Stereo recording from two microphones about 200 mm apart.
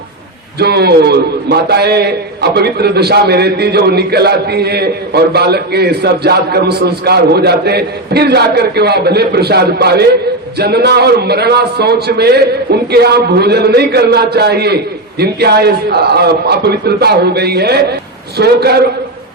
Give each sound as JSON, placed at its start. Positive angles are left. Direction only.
{"t": 0.6, "sound": "a man's voice", "side_deg": -55}